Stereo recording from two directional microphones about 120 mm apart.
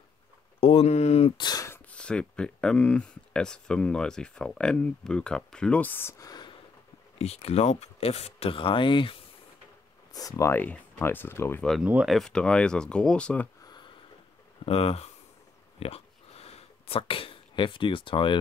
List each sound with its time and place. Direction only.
0.6 s speech: 55° left (ahead or behind)
1.4 s speech: 35° left (ahead or behind)
1.7 s speech: 10° left (ahead or behind); by 6.5 s 30° left (ahead or behind)
7.2 s speech: 60° left (ahead or behind); by 9.1 s 45° left (ahead or behind)
10.1 s speech: 30° left (ahead or behind)
11.8 s speech: 10° right (ahead or behind)
12.2 s speech: 5° left (ahead or behind)
13.7 s a sound: 40° left (ahead or behind)
14.6 s speech: 55° left (ahead or behind)
15.8 s a sound: 55° left (ahead or behind)